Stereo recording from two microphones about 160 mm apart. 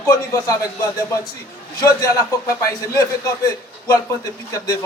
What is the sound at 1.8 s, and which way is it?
A man's voice, 20° left (ahead or behind).